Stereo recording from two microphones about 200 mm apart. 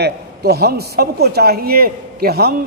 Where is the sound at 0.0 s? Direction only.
50° right (ahead or behind).